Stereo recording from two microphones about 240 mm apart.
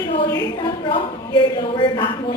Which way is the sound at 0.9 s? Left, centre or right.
Left.